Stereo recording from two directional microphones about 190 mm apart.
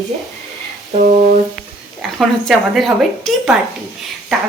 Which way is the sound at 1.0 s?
40° right (ahead or behind).